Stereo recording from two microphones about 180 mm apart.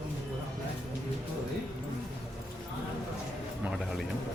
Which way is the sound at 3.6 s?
Centre (ahead or behind).